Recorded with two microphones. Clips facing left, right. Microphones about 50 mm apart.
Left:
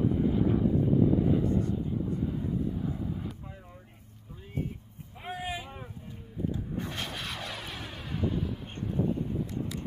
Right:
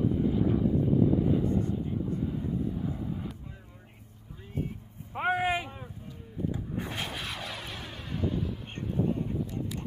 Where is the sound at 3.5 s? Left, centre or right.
Centre.